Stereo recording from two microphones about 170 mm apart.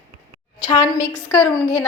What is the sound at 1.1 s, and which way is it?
Speech, 5° left (ahead or behind).